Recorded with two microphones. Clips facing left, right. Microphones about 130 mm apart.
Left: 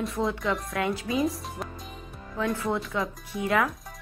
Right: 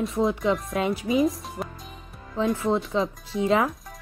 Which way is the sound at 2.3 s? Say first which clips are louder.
Right 4 dB; 20° right (ahead or behind).